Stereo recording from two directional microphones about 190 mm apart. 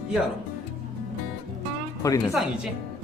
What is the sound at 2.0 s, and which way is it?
Speech, 15° left (ahead or behind).